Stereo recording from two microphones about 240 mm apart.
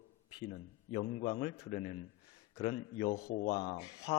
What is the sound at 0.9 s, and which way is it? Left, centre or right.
Speech, left.